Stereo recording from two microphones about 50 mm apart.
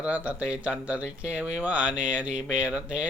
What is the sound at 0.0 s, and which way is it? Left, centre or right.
Speech, right.